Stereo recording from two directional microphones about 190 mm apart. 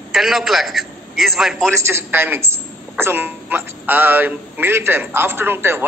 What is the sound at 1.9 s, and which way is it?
A woman's voice, 10° right (ahead or behind).